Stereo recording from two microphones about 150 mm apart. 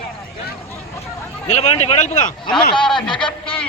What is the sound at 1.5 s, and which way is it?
Speech, 45° left (ahead or behind).